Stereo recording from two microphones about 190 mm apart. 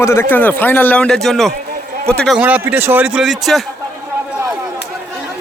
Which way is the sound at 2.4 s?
10° right (ahead or behind).